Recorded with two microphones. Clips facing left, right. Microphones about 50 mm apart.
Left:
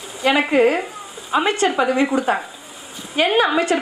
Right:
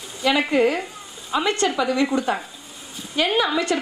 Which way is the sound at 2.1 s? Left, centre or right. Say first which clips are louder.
Left 3 dB; centre.